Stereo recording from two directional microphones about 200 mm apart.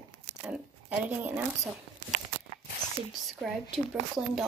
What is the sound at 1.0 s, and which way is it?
Speech, 10° right (ahead or behind).